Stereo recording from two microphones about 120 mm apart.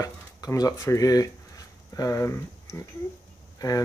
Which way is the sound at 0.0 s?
30° left (ahead or behind).